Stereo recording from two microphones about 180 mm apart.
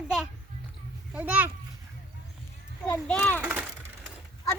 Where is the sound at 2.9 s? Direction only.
5° left (ahead or behind).